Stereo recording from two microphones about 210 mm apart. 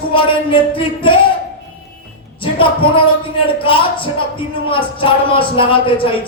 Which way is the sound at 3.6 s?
25° left (ahead or behind).